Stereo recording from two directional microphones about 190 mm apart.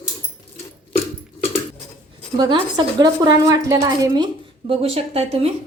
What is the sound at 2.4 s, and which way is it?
Speech, 20° right (ahead or behind).